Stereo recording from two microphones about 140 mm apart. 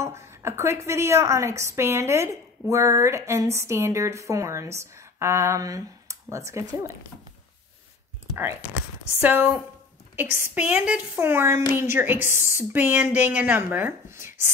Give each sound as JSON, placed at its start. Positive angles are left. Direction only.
{"t": 0.0, "sound": "a woman's voice", "side_deg": -20}
{"t": 9.2, "sound": "speech", "side_deg": -10}